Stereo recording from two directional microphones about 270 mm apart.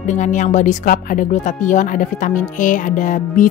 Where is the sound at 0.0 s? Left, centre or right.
Left.